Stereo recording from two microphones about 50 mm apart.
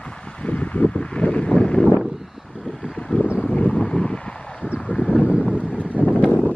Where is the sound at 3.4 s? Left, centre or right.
Left.